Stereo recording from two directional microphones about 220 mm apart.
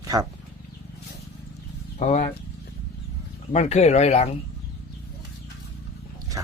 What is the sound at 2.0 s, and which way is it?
Speech, 30° left (ahead or behind).